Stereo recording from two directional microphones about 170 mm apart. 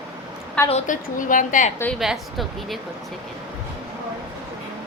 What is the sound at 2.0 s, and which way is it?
Speech, centre (ahead or behind).